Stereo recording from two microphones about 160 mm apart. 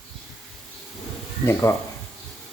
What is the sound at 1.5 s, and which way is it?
Speech, 20° left (ahead or behind).